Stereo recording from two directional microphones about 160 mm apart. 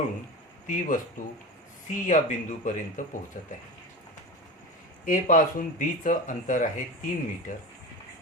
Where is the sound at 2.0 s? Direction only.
50° left (ahead or behind).